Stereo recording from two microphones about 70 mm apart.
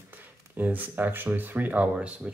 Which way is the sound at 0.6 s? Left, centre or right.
Right.